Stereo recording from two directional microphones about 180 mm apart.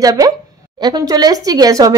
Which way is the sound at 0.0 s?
20° right (ahead or behind).